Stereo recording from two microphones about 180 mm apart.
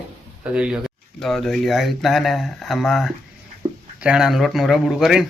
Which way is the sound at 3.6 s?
20° right (ahead or behind).